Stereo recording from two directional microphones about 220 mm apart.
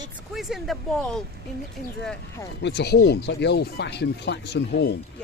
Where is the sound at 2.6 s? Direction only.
50° left (ahead or behind).